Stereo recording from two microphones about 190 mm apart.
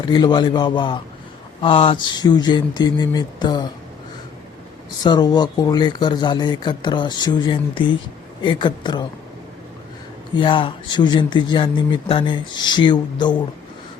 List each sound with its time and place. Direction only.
0.1 s speech: 25° left (ahead or behind)
5.0 s speech: 20° left (ahead or behind)
10.3 s speech: 25° left (ahead or behind)